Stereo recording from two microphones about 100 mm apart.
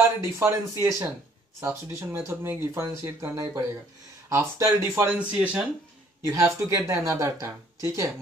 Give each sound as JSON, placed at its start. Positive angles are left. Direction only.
{"t": 0.2, "sound": "speech", "side_deg": -25}
{"t": 5.2, "sound": "speech", "side_deg": -15}
{"t": 6.2, "sound": "speech", "side_deg": -30}